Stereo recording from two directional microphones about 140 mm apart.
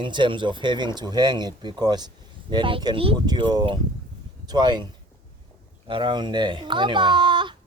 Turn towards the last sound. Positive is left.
turn(degrees=-35)  # may be behind; listen again after turning